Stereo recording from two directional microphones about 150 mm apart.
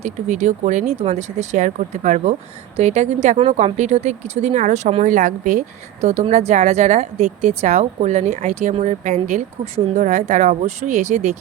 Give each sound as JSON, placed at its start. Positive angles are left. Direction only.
{"t": 0.0, "sound": "speech", "side_deg": -50}